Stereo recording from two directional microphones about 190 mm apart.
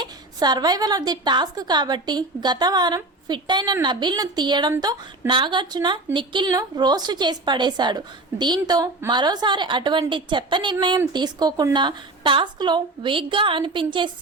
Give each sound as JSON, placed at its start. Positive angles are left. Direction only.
{"t": 0.0, "sound": "a woman's voice", "side_deg": -20}